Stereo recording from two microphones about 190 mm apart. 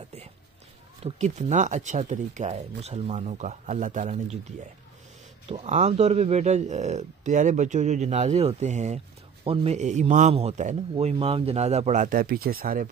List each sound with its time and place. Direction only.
1.0 s speech: 40° right (ahead or behind)
5.5 s speech: 35° right (ahead or behind); by 12.8 s 50° right (ahead or behind)